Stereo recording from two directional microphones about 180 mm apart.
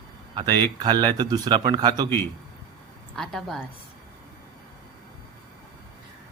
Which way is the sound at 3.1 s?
Centre (ahead or behind).